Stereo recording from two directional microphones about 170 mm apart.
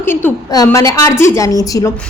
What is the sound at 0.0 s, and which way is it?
A woman's voice, 15° left (ahead or behind).